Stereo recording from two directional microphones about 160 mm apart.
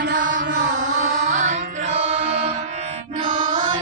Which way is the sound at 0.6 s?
50° right (ahead or behind).